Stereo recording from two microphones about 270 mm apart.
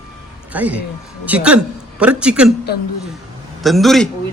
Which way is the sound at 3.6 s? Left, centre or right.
Centre.